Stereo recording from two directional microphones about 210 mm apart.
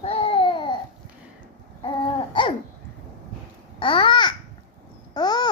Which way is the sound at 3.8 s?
25° left (ahead or behind).